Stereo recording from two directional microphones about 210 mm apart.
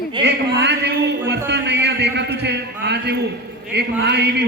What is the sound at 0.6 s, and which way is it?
A man's voice, 55° right (ahead or behind).